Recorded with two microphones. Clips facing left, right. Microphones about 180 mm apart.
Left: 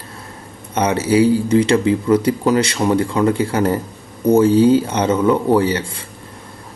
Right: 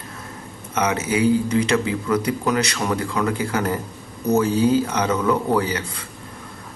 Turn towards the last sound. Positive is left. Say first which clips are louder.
# left 6 dB
turn(degrees=30)  # may be behind; listen again after turning